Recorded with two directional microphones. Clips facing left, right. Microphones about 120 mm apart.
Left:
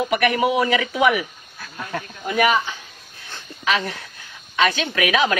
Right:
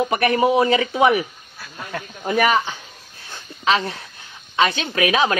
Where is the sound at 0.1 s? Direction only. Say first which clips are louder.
Right 1 dB; 30° right (ahead or behind).